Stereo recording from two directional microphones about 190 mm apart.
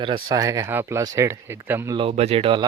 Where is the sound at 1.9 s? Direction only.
30° right (ahead or behind).